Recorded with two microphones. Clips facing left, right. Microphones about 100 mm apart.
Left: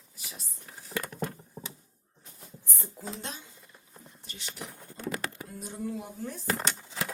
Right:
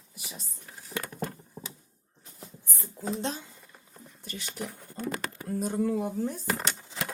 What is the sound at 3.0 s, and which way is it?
Speech, 5° left (ahead or behind).